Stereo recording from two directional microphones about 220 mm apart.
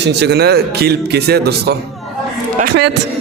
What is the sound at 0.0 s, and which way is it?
Speech, 50° right (ahead or behind).